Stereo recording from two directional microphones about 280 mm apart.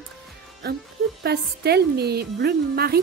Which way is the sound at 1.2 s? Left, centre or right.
Right.